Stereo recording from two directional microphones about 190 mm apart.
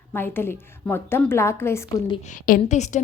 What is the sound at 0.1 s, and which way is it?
A woman's voice, 10° left (ahead or behind).